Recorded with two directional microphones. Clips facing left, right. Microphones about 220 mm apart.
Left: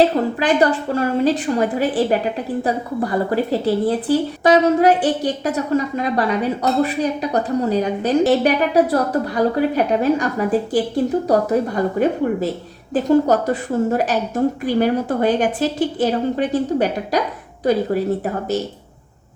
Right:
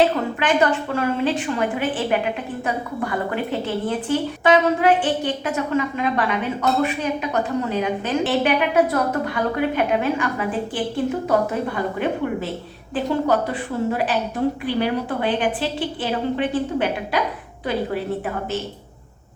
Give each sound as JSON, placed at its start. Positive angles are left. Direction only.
{"t": 0.0, "sound": "a woman's voice", "side_deg": 35}